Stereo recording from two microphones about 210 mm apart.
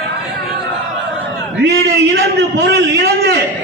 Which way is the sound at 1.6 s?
60° right (ahead or behind).